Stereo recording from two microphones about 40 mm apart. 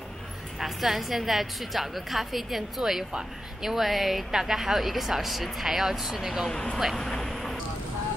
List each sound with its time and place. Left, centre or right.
0.6 s a woman's voice: centre
6.5 s speech: left
7.2 s vehicle: centre